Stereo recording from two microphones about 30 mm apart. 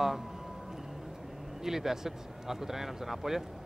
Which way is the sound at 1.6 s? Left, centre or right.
Centre.